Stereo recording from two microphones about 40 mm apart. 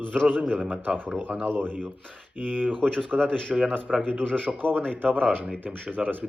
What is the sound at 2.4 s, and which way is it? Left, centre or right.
Speech, right.